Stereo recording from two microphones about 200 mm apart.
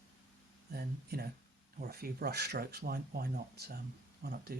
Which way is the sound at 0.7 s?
50° right (ahead or behind).